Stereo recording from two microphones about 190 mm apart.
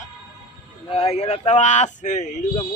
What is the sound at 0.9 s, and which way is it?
Speech, 30° left (ahead or behind).